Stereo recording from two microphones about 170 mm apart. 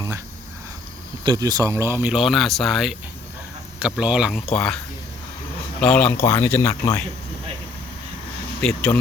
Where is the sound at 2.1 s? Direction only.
Centre (ahead or behind).